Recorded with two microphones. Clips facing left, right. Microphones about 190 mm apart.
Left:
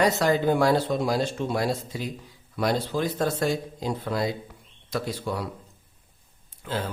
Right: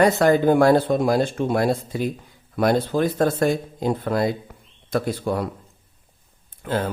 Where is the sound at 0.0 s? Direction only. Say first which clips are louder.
Right 5 dB; 55° right (ahead or behind).